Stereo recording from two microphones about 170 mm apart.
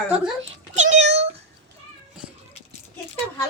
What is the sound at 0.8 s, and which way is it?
Cat, 45° right (ahead or behind).